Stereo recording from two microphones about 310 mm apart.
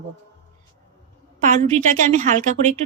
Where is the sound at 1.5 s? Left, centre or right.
Right.